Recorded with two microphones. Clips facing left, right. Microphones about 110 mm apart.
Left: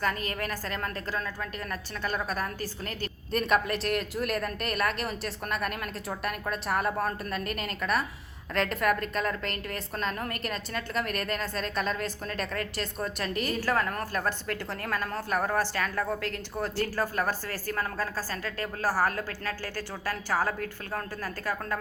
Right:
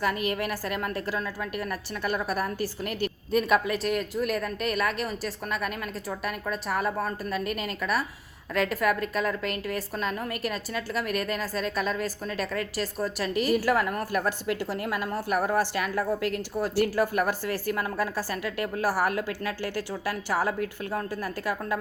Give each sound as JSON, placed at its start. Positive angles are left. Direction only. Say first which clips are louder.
{"t": 0.0, "sound": "a woman's voice", "louder": "right 3 dB", "side_deg": -15}